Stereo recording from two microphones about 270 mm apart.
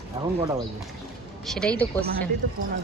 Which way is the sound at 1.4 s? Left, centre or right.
Centre.